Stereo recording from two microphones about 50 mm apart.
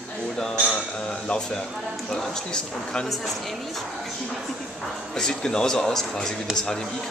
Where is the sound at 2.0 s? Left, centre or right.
Centre.